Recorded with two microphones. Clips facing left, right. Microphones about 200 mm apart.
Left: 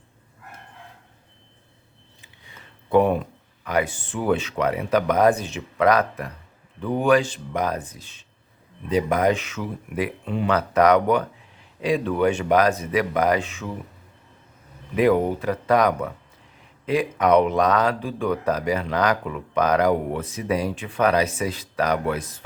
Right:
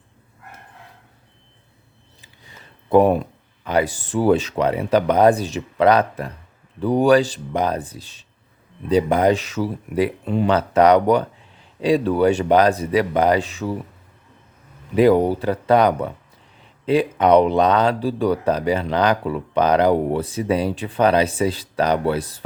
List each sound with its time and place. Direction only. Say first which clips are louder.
2.9 s speech: right 4 dB; 40° right (ahead or behind)
14.9 s speech: right 4 dB; 35° right (ahead or behind)